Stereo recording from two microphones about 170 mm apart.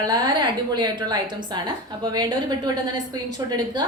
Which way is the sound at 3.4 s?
25° right (ahead or behind).